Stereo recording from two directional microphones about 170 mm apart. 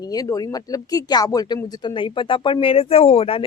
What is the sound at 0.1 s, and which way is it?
A woman's voice, 20° left (ahead or behind).